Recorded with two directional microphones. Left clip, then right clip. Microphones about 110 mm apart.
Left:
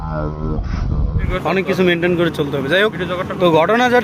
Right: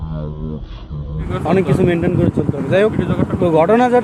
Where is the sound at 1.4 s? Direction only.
15° right (ahead or behind).